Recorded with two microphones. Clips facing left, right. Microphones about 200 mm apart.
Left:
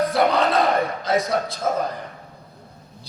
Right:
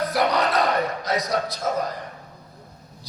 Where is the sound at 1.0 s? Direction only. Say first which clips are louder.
Left 3 dB; 25° left (ahead or behind).